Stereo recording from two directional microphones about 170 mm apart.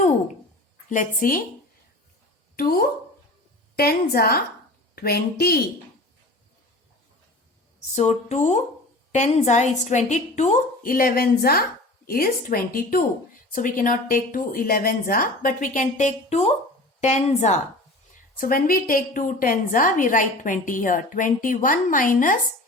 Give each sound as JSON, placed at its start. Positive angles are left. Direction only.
{"t": 0.9, "sound": "a woman's voice", "side_deg": 50}
{"t": 2.6, "sound": "speech", "side_deg": 60}
{"t": 7.9, "sound": "a woman's voice", "side_deg": 40}
{"t": 18.3, "sound": "a woman's voice", "side_deg": 55}